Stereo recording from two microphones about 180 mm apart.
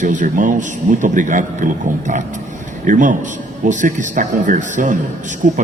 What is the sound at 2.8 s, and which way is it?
Speech, 45° right (ahead or behind).